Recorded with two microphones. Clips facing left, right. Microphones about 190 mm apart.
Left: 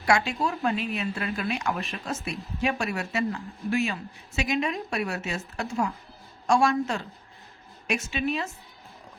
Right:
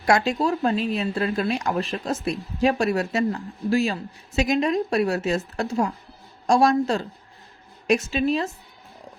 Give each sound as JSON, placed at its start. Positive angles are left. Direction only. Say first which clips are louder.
{"t": 0.0, "sound": "speech", "louder": "right 4 dB", "side_deg": -40}